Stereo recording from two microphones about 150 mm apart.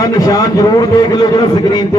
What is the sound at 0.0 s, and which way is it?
A man's voice, 25° left (ahead or behind).